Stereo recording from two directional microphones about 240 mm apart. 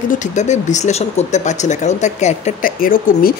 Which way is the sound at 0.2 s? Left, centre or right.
Left.